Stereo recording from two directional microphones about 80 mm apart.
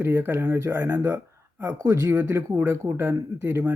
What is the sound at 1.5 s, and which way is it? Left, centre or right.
Speech, right.